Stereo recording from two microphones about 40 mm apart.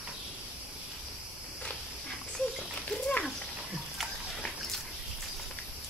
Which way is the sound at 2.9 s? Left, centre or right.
Left.